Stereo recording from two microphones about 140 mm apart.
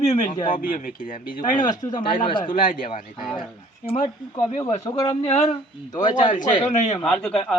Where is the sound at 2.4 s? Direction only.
90° left.